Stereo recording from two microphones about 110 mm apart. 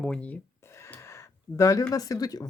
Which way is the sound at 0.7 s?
25° left (ahead or behind).